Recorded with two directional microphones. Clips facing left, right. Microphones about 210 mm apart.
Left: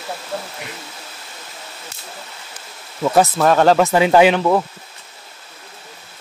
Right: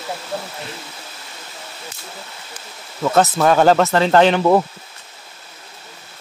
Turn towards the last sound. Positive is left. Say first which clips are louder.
# right 2 dB
turn(degrees=-15)  # may be behind; listen again after turning